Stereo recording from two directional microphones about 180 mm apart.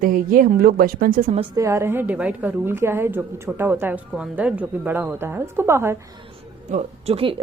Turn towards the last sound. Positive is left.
turn(degrees=-35)  # may be behind; listen again after turning